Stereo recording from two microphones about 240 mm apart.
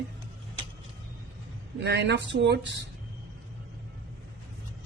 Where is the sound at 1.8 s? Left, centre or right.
Right.